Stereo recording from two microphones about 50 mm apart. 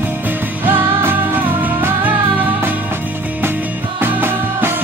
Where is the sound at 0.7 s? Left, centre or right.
Right.